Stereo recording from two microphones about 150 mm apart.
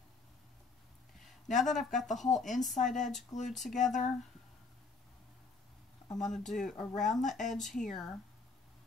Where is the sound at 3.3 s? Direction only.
55° left (ahead or behind).